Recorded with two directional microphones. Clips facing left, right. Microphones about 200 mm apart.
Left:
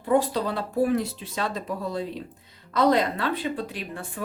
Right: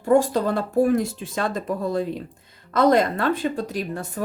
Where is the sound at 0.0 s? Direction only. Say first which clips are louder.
Right 4 dB; 45° right (ahead or behind).